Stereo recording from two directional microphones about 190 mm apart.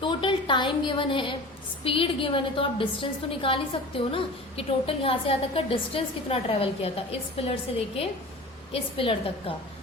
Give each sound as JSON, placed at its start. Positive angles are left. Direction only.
{"t": 0.0, "sound": "a woman's voice", "side_deg": 25}
{"t": 8.7, "sound": "a woman's voice", "side_deg": 30}